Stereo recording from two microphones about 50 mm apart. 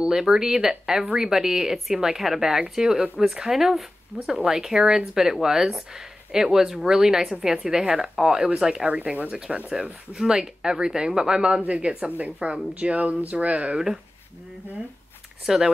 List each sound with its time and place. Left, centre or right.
0.0 s speech: centre
15.4 s speech: centre